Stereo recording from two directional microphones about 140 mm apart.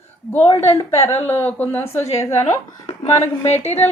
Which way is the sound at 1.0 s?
15° left (ahead or behind).